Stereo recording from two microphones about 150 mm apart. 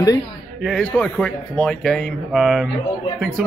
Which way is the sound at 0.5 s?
Centre (ahead or behind).